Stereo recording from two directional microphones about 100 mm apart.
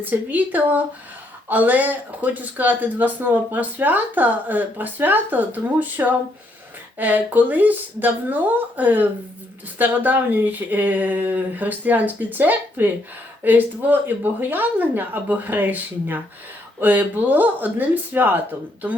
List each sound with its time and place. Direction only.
0.0 s speech: 15° right (ahead or behind)